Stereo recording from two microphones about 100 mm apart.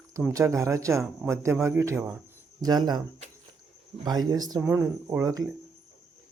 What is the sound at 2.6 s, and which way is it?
Speech, 40° right (ahead or behind).